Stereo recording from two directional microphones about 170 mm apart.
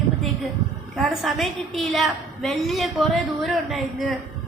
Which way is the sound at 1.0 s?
Centre (ahead or behind).